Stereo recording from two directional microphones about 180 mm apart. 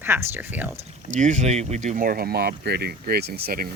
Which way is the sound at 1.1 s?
40° right (ahead or behind).